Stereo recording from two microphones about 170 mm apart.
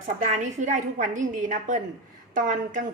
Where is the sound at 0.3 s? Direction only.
45° right (ahead or behind).